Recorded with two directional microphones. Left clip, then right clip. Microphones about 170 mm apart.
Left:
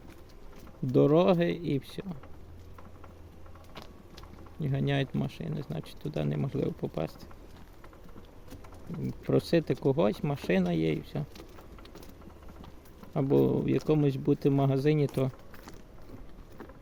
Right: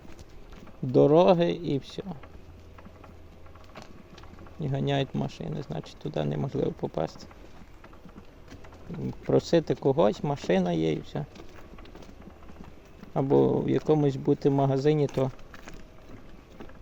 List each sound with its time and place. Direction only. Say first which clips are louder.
0.9 s speech: right 4 dB; 25° left (ahead or behind)
4.6 s speech: right 3 dB; 25° left (ahead or behind)
9.2 s speech: right 4 dB; 25° left (ahead or behind)
13.1 s speech: right 3 dB; 25° left (ahead or behind)